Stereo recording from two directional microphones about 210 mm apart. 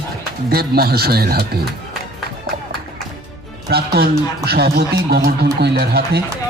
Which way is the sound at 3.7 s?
50° right (ahead or behind).